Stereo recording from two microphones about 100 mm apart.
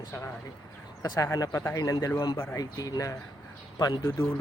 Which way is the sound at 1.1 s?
35° left (ahead or behind).